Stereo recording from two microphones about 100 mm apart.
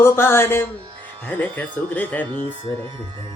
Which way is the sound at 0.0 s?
25° left (ahead or behind).